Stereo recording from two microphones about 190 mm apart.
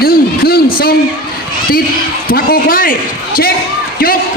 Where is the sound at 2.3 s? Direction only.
50° left (ahead or behind).